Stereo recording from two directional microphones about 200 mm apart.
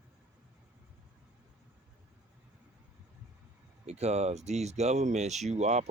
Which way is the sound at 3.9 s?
35° right (ahead or behind).